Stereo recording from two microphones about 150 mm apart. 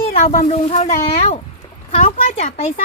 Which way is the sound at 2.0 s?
60° left (ahead or behind).